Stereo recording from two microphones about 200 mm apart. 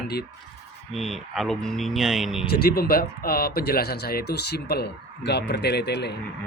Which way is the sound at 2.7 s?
50° left (ahead or behind).